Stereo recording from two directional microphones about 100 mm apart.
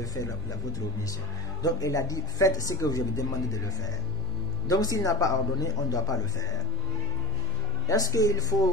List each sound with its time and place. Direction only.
0.0 s speech: 35° left (ahead or behind)
1.6 s speech: 35° left (ahead or behind)
7.9 s speech: 35° left (ahead or behind)